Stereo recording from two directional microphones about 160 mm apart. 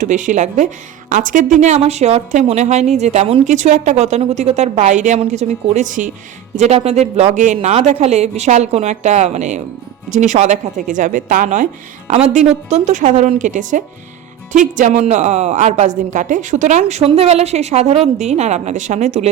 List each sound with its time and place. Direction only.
0.0 s a woman's voice: 50° right (ahead or behind)
6.6 s a woman's voice: 40° right (ahead or behind)